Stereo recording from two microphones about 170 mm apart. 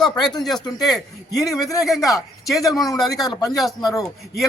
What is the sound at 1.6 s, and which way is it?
Speech, 20° left (ahead or behind).